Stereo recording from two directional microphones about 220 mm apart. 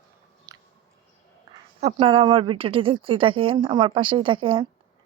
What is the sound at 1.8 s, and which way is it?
Speech, 25° right (ahead or behind).